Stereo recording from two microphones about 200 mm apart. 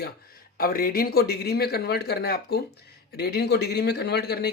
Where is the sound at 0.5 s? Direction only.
45° left (ahead or behind).